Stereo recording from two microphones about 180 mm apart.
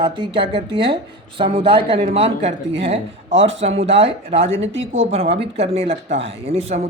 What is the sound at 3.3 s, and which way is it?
Speech, 90° right.